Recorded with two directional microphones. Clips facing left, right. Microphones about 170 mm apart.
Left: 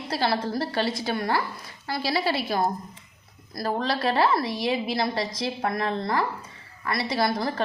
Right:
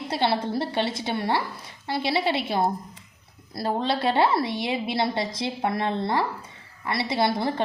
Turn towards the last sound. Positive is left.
turn(degrees=-25)  # may be behind; listen again after turning